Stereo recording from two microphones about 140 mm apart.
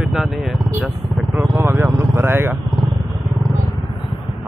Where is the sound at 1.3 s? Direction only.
20° right (ahead or behind).